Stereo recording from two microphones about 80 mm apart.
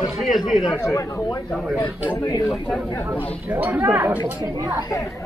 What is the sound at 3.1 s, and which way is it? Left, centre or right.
Speech, right.